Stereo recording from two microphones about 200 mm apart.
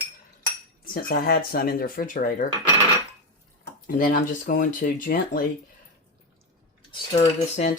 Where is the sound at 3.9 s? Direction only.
45° left (ahead or behind).